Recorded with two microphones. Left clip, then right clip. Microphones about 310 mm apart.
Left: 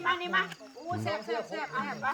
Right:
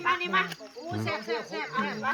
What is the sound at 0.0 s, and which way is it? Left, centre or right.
Speech, centre.